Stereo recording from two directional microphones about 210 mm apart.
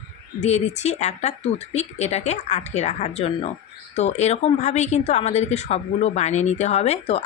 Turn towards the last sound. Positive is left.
turn(degrees=30)  # may be behind; listen again after turning